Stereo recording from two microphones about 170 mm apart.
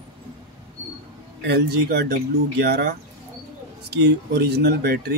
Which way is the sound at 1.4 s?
75° right (ahead or behind).